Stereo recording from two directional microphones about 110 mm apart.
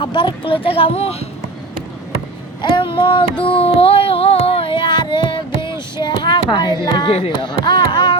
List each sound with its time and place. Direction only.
0.0 s speech: 45° left (ahead or behind); by 1.1 s 70° left (ahead or behind)
2.6 s speech: 45° left (ahead or behind)
3.4 s child singing: 60° left (ahead or behind); by 6.7 s 45° left (ahead or behind)
6.8 s speech: 40° left (ahead or behind)
7.1 s a sound: 60° left (ahead or behind)